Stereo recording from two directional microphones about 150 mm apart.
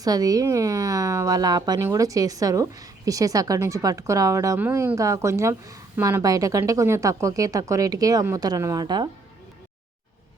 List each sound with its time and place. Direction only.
0.0 s a woman's voice: 25° right (ahead or behind)